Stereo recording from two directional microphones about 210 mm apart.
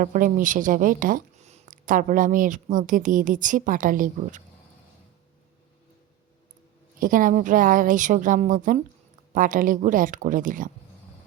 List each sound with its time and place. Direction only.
0.0 s speech: 40° right (ahead or behind)
7.0 s speech: 40° right (ahead or behind)